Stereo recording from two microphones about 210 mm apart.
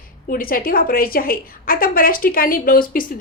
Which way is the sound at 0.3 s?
45° left (ahead or behind).